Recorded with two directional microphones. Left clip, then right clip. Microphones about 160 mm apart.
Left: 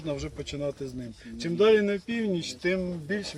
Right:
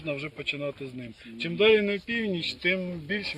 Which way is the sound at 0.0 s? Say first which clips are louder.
Right 2 dB; 25° left (ahead or behind).